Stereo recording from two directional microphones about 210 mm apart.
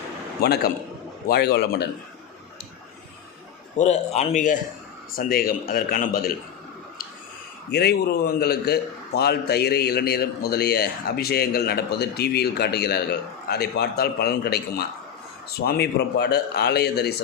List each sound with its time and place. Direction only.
0.4 s a man's voice: 50° left (ahead or behind)
3.8 s a man's voice: 30° left (ahead or behind)
7.7 s a man's voice: 50° left (ahead or behind)